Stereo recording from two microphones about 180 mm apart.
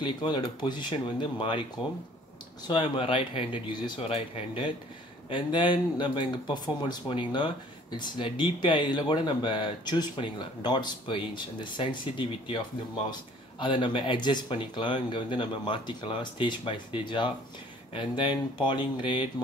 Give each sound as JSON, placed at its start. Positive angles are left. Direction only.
{"t": 0.0, "sound": "speech", "side_deg": 25}
{"t": 2.7, "sound": "speech", "side_deg": 30}